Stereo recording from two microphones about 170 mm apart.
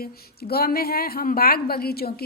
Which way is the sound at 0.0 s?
65° left (ahead or behind).